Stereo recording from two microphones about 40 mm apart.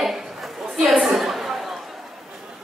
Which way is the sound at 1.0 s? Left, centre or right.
Centre.